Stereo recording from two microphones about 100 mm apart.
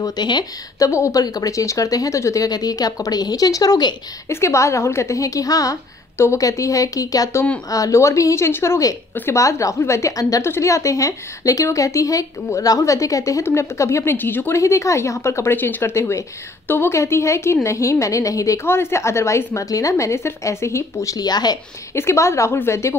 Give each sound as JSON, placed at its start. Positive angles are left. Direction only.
{"t": 0.0, "sound": "speech", "side_deg": 45}
{"t": 4.3, "sound": "a woman's voice", "side_deg": 25}
{"t": 21.9, "sound": "a woman's voice", "side_deg": 25}